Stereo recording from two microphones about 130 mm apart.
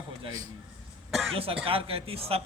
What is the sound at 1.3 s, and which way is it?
A man's voice, 45° right (ahead or behind).